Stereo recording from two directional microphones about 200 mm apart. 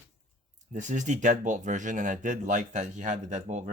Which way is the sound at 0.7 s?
40° right (ahead or behind).